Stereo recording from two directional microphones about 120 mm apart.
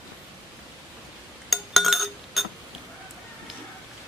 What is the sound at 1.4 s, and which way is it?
Chink, centre (ahead or behind).